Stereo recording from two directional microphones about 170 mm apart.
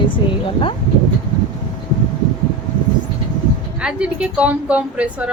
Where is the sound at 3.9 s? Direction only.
5° right (ahead or behind).